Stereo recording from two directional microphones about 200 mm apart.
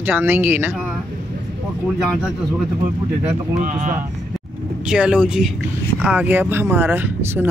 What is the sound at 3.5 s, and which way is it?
Speech, 40° right (ahead or behind).